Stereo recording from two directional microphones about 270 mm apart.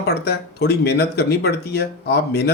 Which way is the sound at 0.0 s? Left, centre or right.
Left.